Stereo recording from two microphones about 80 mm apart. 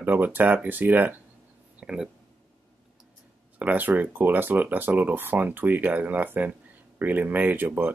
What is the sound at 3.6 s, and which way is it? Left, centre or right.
Speech, right.